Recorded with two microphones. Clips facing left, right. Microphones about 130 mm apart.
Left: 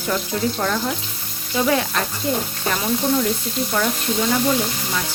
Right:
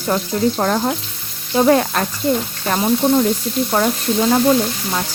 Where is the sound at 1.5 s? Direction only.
45° right (ahead or behind).